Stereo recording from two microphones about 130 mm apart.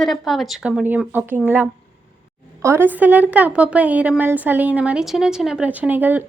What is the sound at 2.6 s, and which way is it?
A woman's voice, 20° right (ahead or behind).